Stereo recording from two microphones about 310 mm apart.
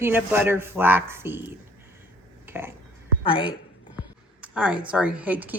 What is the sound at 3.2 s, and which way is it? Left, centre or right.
Speech, centre.